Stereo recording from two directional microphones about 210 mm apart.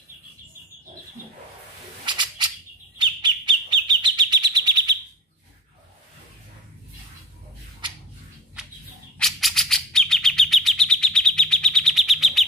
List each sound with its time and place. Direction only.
2.0 s a sound: 20° right (ahead or behind)
3.0 s bird: 20° right (ahead or behind)
9.2 s chirp: centre (ahead or behind)